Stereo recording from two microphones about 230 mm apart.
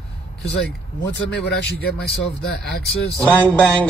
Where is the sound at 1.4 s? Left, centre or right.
Left.